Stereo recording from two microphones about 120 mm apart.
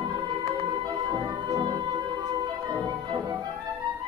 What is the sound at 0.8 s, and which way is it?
Music, 35° right (ahead or behind).